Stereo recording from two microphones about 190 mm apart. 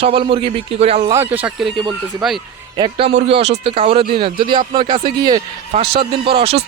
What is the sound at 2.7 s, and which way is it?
Speech, 25° right (ahead or behind).